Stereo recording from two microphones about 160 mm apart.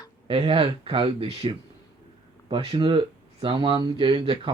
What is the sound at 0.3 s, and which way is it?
Speech, 35° right (ahead or behind).